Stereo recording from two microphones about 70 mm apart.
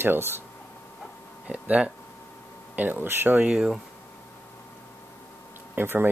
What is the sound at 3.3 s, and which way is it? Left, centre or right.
Speech, centre.